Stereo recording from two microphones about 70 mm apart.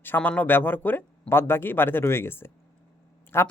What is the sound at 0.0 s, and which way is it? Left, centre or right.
Speech, left.